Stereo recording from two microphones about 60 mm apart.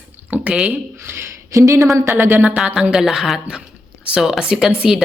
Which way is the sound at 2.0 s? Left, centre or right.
Right.